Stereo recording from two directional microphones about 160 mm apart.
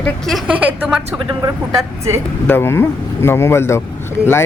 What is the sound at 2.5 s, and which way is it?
Speech, 15° left (ahead or behind).